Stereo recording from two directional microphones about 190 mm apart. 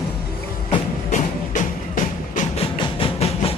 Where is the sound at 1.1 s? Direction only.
40° left (ahead or behind).